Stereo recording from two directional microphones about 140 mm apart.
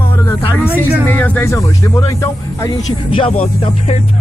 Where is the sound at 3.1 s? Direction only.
40° left (ahead or behind).